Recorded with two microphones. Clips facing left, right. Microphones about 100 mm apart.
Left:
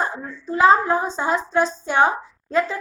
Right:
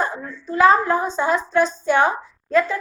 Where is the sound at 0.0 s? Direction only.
25° left (ahead or behind).